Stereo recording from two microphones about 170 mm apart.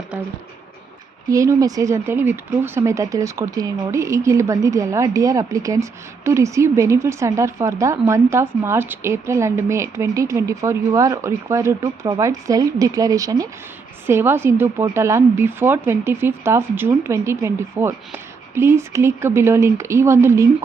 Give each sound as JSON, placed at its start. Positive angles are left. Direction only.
{"t": 1.3, "sound": "speech", "side_deg": -20}